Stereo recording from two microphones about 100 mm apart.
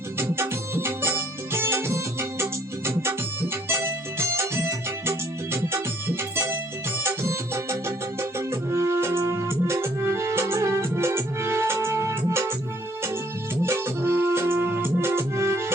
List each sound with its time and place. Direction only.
0.2 s music: 25° right (ahead or behind)
13.6 s music: 25° right (ahead or behind)